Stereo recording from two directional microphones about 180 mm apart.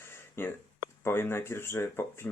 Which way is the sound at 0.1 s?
10° left (ahead or behind).